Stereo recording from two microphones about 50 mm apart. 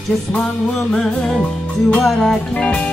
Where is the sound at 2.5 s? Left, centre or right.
Left.